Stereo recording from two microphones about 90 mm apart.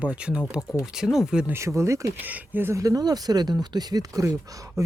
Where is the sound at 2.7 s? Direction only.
40° right (ahead or behind).